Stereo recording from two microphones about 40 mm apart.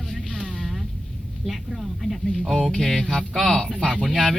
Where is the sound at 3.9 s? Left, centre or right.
Centre.